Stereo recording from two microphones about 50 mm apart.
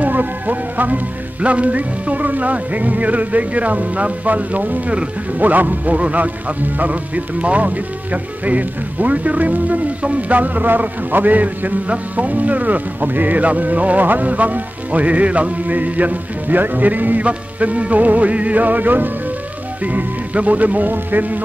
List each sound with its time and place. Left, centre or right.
0.0 s a man's voice: right